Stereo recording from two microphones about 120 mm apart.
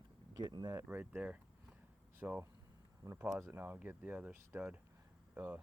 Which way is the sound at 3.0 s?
30° right (ahead or behind).